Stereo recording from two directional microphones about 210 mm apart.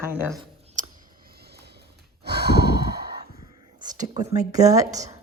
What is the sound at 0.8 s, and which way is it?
Sigh, 40° right (ahead or behind).